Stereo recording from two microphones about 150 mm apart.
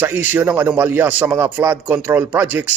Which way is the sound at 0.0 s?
10° right (ahead or behind).